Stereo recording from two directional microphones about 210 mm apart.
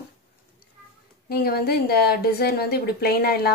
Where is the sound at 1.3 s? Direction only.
45° left (ahead or behind).